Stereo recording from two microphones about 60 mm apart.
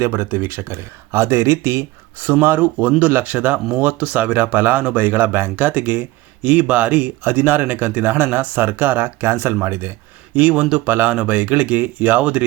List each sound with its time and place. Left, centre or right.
0.0 s speech: right
2.2 s speech: right
10.3 s speech: right